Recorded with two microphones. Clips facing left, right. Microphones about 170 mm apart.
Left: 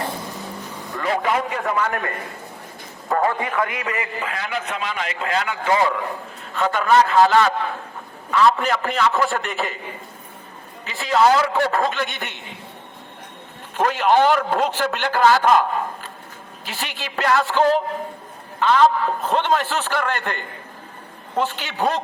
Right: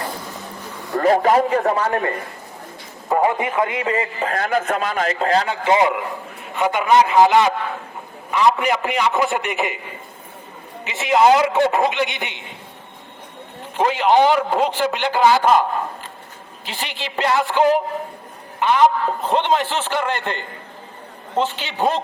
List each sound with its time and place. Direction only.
0.9 s a man's voice: 40° right (ahead or behind)
3.1 s a man's voice: 15° right (ahead or behind); by 5.5 s 35° right (ahead or behind)
5.6 s a man's voice: 20° right (ahead or behind)
10.8 s a man's voice: 20° right (ahead or behind)
13.7 s a man's voice: 15° right (ahead or behind)
16.7 s a man's voice: 15° right (ahead or behind)